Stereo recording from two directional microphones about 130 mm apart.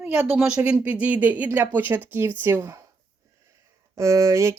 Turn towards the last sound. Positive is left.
turn(degrees=-25)  # may be behind; listen again after turning